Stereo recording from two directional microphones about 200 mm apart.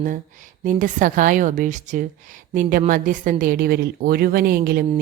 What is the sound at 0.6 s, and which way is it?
A woman's voice, 40° right (ahead or behind).